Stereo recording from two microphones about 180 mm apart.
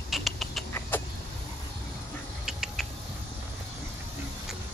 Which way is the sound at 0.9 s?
10° left (ahead or behind).